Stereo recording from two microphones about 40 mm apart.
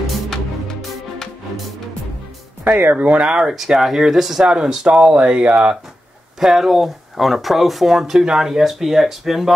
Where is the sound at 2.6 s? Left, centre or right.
Right.